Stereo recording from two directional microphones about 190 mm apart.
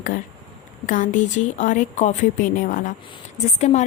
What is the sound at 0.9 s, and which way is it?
A woman's voice, 40° left (ahead or behind).